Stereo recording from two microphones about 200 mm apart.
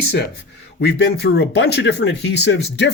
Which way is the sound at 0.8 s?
55° left (ahead or behind).